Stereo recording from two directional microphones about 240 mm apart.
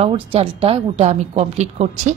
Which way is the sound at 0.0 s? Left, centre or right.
Right.